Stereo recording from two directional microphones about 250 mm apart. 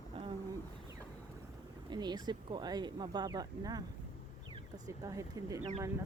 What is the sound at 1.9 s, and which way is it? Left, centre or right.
Speech, centre.